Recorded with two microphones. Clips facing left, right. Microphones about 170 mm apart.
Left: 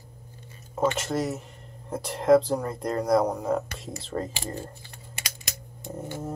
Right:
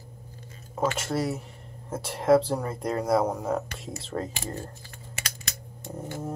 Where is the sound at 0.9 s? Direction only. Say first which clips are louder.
Even; centre (ahead or behind).